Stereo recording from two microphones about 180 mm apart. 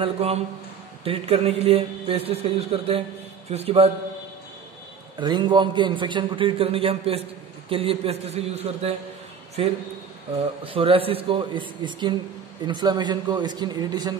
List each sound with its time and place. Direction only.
0.0 s speech: 35° right (ahead or behind)
5.2 s a man's voice: 25° right (ahead or behind)
10.6 s a man's voice: 30° right (ahead or behind)